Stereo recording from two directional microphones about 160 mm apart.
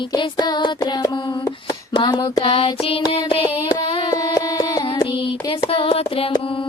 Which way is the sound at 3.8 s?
35° left (ahead or behind).